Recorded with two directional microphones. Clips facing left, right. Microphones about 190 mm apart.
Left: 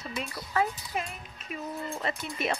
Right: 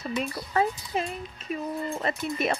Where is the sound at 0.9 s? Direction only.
30° right (ahead or behind).